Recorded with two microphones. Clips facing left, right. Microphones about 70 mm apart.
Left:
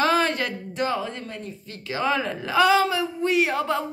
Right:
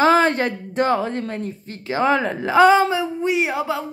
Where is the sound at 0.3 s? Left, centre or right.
Right.